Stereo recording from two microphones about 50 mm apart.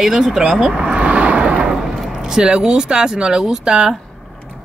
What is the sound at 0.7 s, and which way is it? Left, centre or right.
Vehicle, right.